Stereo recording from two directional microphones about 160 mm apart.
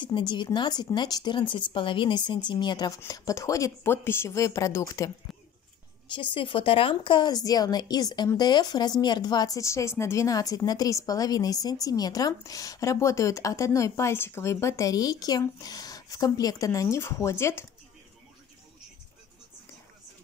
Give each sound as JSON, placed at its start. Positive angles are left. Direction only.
{"t": 0.0, "sound": "a woman's voice", "side_deg": 30}
{"t": 6.0, "sound": "a woman's voice", "side_deg": 30}